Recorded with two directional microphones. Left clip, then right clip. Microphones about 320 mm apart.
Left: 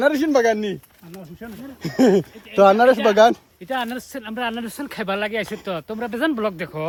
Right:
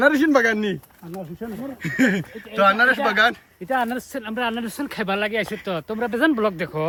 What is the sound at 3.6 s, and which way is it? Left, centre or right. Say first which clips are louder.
Speech: right 4 dB; centre.